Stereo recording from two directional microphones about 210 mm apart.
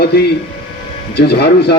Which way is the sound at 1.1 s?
50° left (ahead or behind).